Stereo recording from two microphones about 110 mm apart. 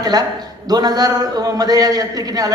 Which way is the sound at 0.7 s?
35° right (ahead or behind).